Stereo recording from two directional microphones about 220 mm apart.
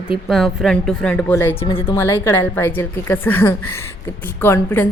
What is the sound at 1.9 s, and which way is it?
A woman's voice, 10° left (ahead or behind).